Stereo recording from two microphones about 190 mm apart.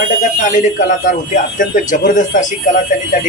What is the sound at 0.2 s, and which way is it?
Speech, 40° left (ahead or behind).